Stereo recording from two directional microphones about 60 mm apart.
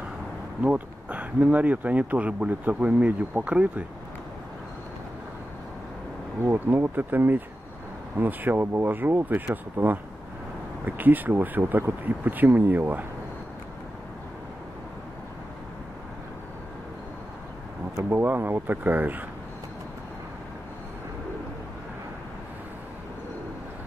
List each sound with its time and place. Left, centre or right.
0.6 s speech: right
6.5 s speech: right
18.1 s speech: right